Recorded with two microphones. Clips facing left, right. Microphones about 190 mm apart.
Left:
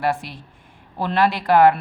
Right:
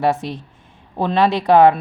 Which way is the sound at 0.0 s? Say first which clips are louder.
Right 4 dB; 20° right (ahead or behind).